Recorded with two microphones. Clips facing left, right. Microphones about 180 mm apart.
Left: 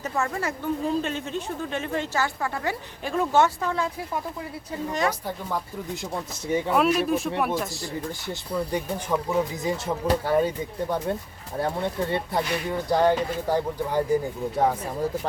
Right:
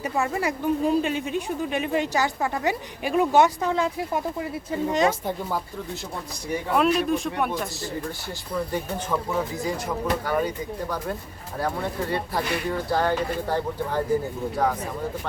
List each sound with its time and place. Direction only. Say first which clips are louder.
0.0 s speech: right 2 dB; 15° right (ahead or behind)
6.7 s a man's voice: right 2 dB; 5° left (ahead or behind)
8.3 s speech: left 1 dB; 15° left (ahead or behind)
14.5 s speech: left 2 dB; 25° left (ahead or behind)